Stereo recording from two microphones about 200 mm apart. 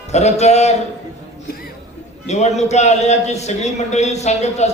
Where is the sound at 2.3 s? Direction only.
35° left (ahead or behind).